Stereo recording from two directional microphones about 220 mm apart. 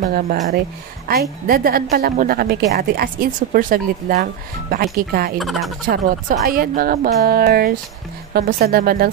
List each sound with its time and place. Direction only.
0.0 s a woman's voice: 40° right (ahead or behind)
5.4 s speech: centre (ahead or behind)
5.9 s a woman's voice: 40° right (ahead or behind)